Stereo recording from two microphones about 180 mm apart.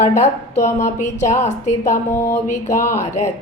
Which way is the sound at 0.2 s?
40° left (ahead or behind).